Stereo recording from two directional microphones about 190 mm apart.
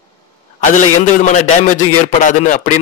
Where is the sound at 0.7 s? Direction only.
40° left (ahead or behind).